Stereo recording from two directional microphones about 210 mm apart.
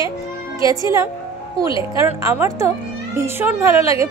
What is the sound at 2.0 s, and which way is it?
Speech, 10° right (ahead or behind).